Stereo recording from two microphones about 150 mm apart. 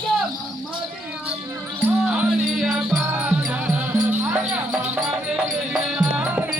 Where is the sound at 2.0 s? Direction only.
5° right (ahead or behind).